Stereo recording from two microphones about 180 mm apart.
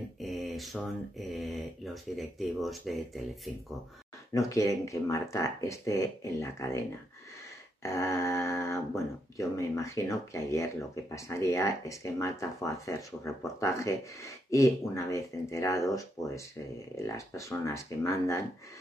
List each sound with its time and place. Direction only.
0.2 s speech: centre (ahead or behind)
4.3 s speech: 15° left (ahead or behind)
7.8 s speech: 15° left (ahead or behind)